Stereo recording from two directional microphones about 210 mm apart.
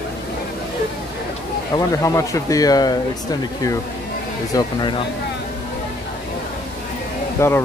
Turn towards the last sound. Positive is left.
turn(degrees=15)  # may be behind; listen again after turning